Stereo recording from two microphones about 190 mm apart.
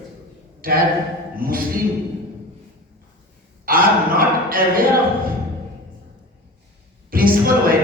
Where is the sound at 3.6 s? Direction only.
50° right (ahead or behind).